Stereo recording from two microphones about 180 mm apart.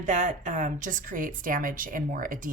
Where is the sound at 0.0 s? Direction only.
45° right (ahead or behind).